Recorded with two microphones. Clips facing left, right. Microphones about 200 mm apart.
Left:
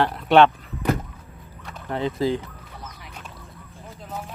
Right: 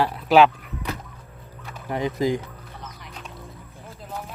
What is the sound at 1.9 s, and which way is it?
Speech, 15° right (ahead or behind).